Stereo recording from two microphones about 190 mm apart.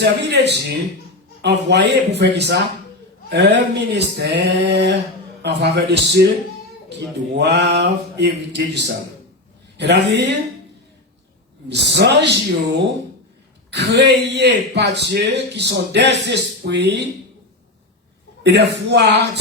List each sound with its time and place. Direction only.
0.0 s speech: 65° right (ahead or behind)
7.3 s speech: 65° right (ahead or behind)
11.7 s speech: 65° right (ahead or behind)
13.7 s speech: 60° right (ahead or behind)
18.4 s speech: 65° right (ahead or behind)